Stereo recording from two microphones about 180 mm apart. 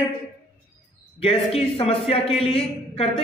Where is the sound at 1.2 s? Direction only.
35° left (ahead or behind).